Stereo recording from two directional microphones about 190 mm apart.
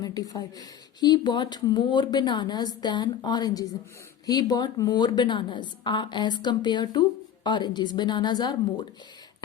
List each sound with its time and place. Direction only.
0.0 s speech: 20° left (ahead or behind)